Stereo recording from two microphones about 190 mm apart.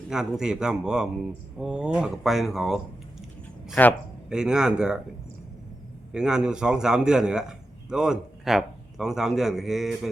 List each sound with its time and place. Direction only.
0.1 s a man's voice: 5° right (ahead or behind)
4.3 s a man's voice: 5° right (ahead or behind)
6.1 s a man's voice: 5° right (ahead or behind)